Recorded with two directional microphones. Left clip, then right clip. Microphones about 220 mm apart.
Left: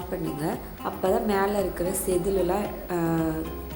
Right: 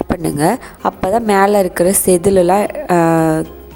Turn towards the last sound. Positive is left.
turn(degrees=-50)  # may be behind; listen again after turning